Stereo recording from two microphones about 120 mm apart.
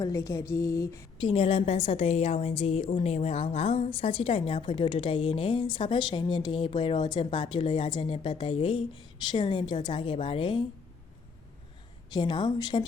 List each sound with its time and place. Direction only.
0.0 s a woman's voice: 25° left (ahead or behind)
1.2 s a woman's voice: 50° left (ahead or behind)
12.1 s a woman's voice: 40° left (ahead or behind)